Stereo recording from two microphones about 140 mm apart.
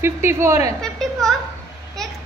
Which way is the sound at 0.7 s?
5° left (ahead or behind).